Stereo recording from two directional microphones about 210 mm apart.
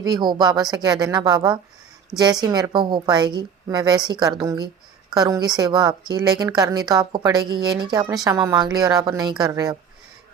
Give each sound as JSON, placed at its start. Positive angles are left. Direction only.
{"t": 0.0, "sound": "a woman's voice", "side_deg": -20}